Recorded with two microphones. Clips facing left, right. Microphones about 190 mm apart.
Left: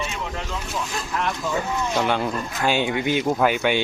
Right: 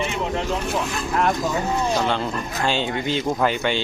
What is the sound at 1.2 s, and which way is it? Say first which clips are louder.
Speech: right 4 dB; 40° right (ahead or behind).